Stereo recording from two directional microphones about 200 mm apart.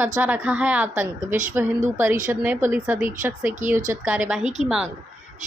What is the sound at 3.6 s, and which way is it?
Speech, 40° right (ahead or behind).